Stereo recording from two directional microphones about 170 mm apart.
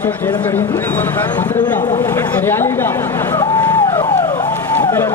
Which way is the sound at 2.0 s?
15° left (ahead or behind).